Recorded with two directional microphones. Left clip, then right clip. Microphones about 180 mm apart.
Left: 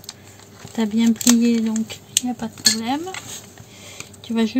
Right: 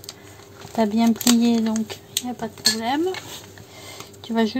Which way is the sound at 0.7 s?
30° right (ahead or behind).